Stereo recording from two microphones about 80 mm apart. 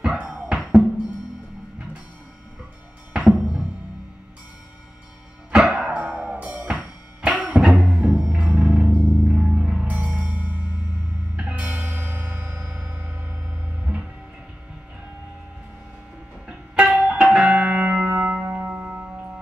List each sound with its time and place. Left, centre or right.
0.0 s music: centre
3.1 s music: centre
5.5 s music: centre
6.0 s music: right; by 9.9 s centre
9.9 s music: centre
16.4 s music: centre